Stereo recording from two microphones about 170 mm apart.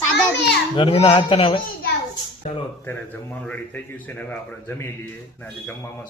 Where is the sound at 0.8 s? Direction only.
30° left (ahead or behind).